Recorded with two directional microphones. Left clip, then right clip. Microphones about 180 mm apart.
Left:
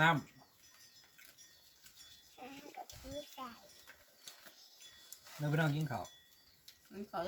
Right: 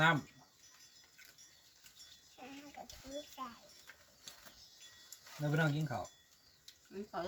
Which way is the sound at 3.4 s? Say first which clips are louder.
Right 3 dB; 20° left (ahead or behind).